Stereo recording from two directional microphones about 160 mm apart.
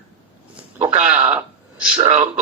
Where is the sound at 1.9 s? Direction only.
30° right (ahead or behind).